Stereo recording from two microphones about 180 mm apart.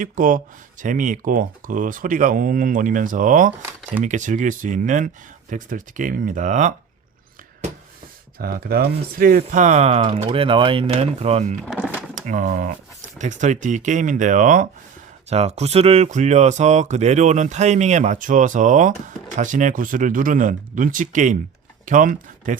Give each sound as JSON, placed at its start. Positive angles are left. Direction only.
{"t": 0.0, "sound": "speech", "side_deg": -50}
{"t": 8.4, "sound": "speech", "side_deg": -55}
{"t": 11.6, "sound": "speech", "side_deg": 0}
{"t": 12.2, "sound": "speech", "side_deg": -45}